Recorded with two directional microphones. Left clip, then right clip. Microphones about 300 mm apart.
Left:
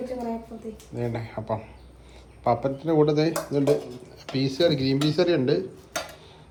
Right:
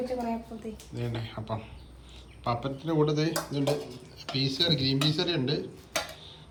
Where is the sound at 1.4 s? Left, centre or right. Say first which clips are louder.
Left 7 dB; centre.